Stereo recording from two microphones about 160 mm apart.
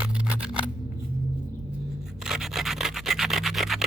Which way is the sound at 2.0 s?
5° right (ahead or behind).